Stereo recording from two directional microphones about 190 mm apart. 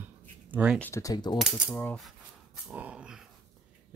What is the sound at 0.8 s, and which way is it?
Speech, 15° left (ahead or behind).